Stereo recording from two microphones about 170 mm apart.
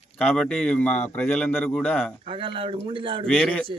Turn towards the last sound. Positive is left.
turn(degrees=5)  # may be behind; listen again after turning